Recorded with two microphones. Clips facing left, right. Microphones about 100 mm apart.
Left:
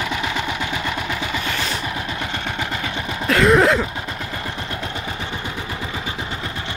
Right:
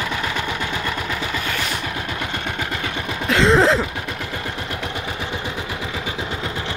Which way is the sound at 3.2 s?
20° right (ahead or behind).